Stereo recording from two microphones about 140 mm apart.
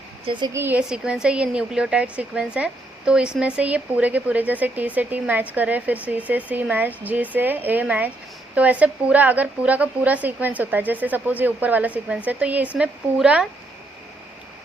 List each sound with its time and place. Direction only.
0.3 s a woman's voice: 35° right (ahead or behind)
0.5 s speech: 15° right (ahead or behind)